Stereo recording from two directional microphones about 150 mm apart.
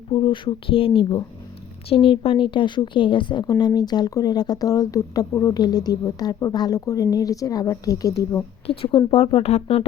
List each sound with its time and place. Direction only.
0.1 s a woman's voice: 35° left (ahead or behind)
8.6 s a woman's voice: 40° left (ahead or behind)